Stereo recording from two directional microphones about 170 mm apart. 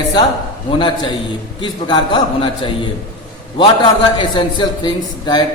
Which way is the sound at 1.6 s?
25° left (ahead or behind).